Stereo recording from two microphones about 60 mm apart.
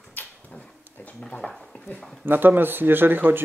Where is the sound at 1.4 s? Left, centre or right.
Centre.